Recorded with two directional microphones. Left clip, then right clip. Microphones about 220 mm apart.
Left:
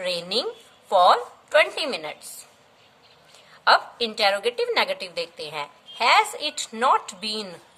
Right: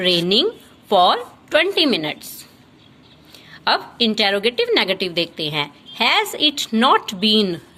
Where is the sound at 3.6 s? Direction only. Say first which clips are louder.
Right 1 dB; 15° right (ahead or behind).